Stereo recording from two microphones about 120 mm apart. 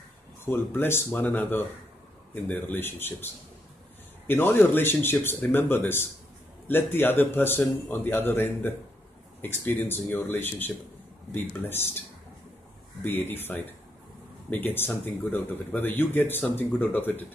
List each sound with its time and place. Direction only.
0.5 s speech: 20° left (ahead or behind)
4.3 s speech: 20° left (ahead or behind)
13.0 s speech: 15° left (ahead or behind)